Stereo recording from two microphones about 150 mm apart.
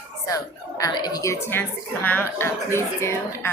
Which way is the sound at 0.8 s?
25° left (ahead or behind).